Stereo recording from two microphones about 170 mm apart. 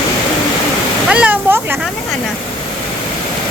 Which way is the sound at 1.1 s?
10° right (ahead or behind).